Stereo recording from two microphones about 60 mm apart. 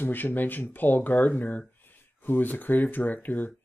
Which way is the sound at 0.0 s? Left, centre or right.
Left.